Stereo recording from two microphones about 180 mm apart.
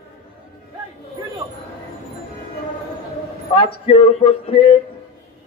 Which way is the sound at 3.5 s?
30° left (ahead or behind).